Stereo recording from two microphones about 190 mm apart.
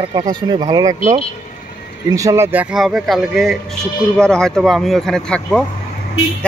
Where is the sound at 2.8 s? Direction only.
Centre (ahead or behind).